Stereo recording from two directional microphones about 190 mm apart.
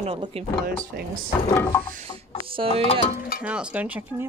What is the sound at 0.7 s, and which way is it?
Speech, 50° right (ahead or behind).